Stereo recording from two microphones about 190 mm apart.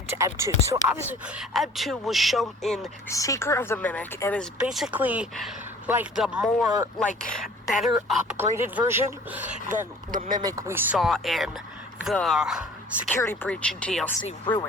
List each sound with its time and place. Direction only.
0.2 s speech: 15° right (ahead or behind); by 2.8 s centre (ahead or behind)
3.1 s a woman's voice: 15° left (ahead or behind)
4.6 s speech: 5° right (ahead or behind)
8.3 s speech: 10° right (ahead or behind)
10.1 s speech: 45° right (ahead or behind)
10.4 s speech: 15° right (ahead or behind)
13.1 s a woman's voice: 10° left (ahead or behind)
14.3 s speech: 25° left (ahead or behind)